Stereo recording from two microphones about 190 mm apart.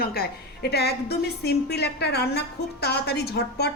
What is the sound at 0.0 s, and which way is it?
A woman's voice, 55° left (ahead or behind).